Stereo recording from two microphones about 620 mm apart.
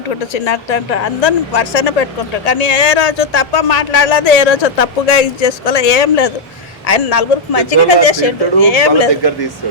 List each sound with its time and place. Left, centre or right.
0.3 s speech: left